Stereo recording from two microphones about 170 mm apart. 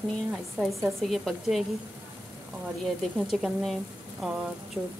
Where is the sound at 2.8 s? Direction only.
Centre (ahead or behind).